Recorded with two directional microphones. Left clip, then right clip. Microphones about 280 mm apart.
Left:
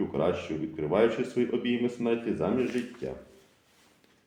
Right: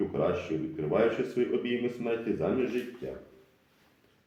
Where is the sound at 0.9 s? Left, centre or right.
Left.